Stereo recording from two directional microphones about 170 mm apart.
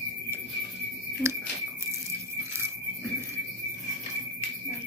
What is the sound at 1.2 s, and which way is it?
Speech, 15° right (ahead or behind).